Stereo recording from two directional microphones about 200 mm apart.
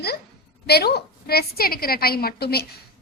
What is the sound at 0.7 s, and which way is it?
A woman's voice, 50° left (ahead or behind).